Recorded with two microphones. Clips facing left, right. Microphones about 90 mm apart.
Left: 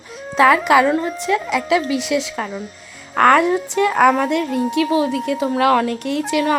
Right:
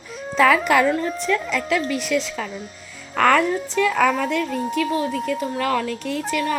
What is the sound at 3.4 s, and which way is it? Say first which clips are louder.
Speech: left 4 dB; 60° left (ahead or behind).